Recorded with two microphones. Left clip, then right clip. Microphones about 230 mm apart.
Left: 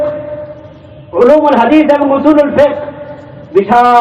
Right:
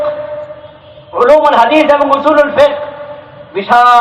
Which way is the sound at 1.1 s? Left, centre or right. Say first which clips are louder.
Even; right.